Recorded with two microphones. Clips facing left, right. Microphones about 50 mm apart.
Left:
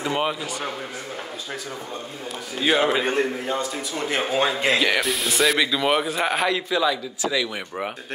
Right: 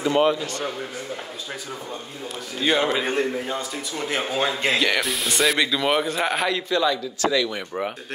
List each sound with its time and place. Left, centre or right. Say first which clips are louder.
0.0 s a man's voice: right 5 dB; centre
2.5 s a man's voice: left 1 dB; centre